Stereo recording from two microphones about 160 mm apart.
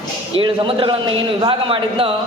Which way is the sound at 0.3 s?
35° right (ahead or behind).